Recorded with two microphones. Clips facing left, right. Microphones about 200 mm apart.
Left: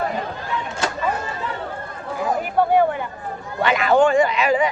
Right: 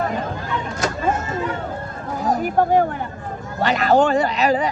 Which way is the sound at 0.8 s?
45° right (ahead or behind).